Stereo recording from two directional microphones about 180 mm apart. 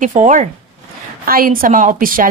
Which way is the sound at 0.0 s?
45° right (ahead or behind).